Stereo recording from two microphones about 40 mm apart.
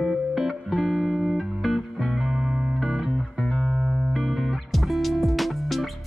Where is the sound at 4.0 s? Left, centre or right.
Centre.